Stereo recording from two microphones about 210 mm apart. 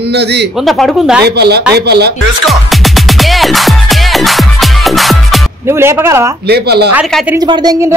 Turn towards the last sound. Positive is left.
turn(degrees=-15)  # may be behind; listen again after turning